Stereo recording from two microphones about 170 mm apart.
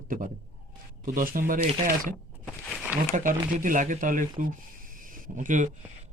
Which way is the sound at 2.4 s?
5° right (ahead or behind).